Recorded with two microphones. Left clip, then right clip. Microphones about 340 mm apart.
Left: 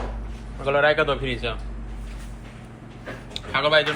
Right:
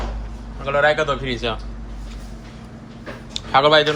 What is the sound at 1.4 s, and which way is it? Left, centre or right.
Speech, centre.